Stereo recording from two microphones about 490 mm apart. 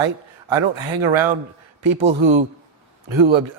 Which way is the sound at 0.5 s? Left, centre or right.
Right.